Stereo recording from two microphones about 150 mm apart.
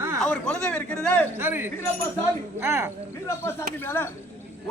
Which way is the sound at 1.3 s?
15° right (ahead or behind).